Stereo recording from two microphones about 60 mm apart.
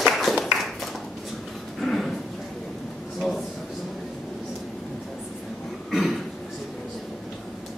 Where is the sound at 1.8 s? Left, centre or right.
Centre.